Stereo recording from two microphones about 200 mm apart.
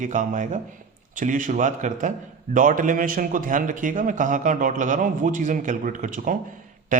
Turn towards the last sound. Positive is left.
turn(degrees=-40)  # may be behind; listen again after turning